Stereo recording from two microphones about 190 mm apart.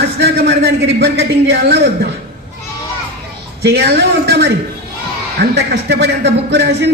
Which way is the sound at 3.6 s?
60° right (ahead or behind).